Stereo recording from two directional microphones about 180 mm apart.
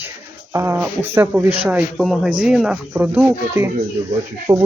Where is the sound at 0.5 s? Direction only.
10° right (ahead or behind).